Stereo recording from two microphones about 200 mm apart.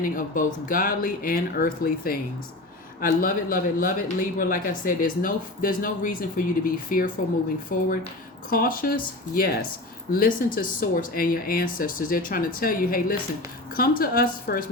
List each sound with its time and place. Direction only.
0.0 s speech: 40° left (ahead or behind)